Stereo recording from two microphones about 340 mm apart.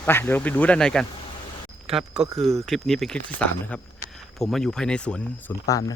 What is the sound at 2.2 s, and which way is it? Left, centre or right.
Speech, centre.